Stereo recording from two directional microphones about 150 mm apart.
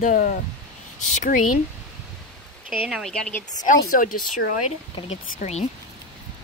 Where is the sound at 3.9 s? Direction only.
65° left (ahead or behind).